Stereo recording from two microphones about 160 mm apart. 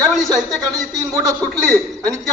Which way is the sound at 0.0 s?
Centre (ahead or behind).